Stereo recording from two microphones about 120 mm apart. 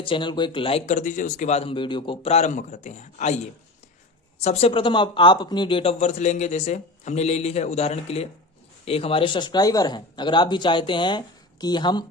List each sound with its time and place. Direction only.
0.0 s speech: 45° left (ahead or behind); by 1.7 s 65° left (ahead or behind)
1.7 s a man's voice: 45° left (ahead or behind)
2.3 s a man's voice: 85° left; by 12.0 s 40° left (ahead or behind)